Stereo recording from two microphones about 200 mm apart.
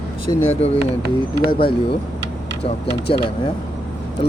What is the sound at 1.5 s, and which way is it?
Speech, 50° left (ahead or behind).